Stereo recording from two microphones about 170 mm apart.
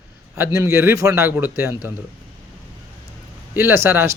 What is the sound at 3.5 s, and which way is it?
Speech, 15° right (ahead or behind).